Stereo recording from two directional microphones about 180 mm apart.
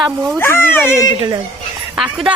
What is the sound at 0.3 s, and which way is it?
Speech, 10° left (ahead or behind).